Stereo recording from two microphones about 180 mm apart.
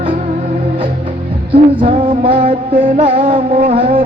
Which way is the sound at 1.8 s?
30° right (ahead or behind).